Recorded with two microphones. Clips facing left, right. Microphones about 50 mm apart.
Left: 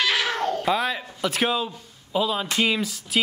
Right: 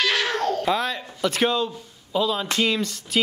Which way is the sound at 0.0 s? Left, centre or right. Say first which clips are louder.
Right 1 dB; centre.